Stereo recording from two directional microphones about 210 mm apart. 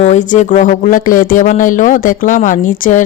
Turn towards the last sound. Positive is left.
turn(degrees=40)  # may be behind; listen again after turning